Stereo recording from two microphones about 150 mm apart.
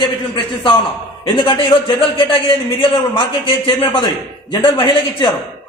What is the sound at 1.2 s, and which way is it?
A man's voice, 30° left (ahead or behind).